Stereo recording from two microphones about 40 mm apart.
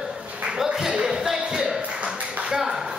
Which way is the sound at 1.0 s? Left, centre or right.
Centre.